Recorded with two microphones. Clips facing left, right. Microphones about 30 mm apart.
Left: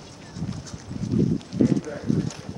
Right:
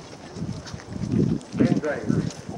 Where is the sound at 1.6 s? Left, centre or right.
Right.